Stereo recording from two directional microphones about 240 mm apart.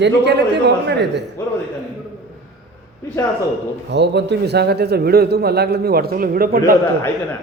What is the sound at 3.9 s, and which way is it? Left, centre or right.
A man's voice, right.